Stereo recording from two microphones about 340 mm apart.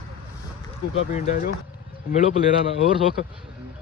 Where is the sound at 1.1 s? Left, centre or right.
Left.